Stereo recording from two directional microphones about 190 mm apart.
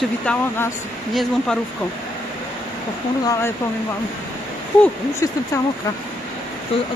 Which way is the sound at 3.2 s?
15° left (ahead or behind).